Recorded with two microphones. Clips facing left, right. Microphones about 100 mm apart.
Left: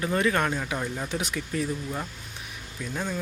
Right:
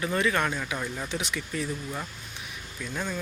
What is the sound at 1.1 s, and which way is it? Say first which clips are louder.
Speech: left 2 dB; 45° left (ahead or behind).